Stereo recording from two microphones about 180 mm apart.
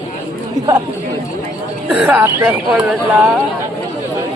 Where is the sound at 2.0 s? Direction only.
10° right (ahead or behind).